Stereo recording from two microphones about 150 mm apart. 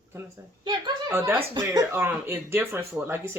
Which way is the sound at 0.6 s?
30° right (ahead or behind).